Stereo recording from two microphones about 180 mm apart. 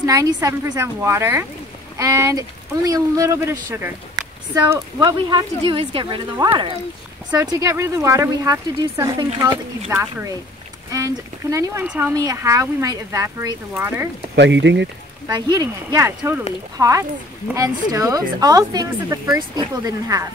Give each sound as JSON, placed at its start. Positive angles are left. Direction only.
{"t": 0.0, "sound": "speech", "side_deg": -20}
{"t": 4.6, "sound": "speech", "side_deg": -15}
{"t": 11.5, "sound": "speech", "side_deg": -10}
{"t": 14.3, "sound": "speech", "side_deg": -80}
{"t": 15.2, "sound": "speech", "side_deg": -25}